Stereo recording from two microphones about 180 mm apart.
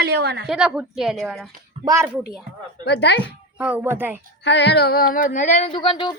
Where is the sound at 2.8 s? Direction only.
70° left (ahead or behind).